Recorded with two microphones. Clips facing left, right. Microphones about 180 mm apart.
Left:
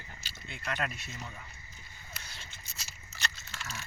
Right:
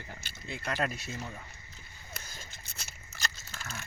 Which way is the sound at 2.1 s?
45° right (ahead or behind).